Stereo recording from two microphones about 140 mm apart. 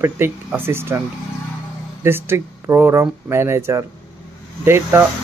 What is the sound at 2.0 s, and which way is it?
Speech, 15° right (ahead or behind).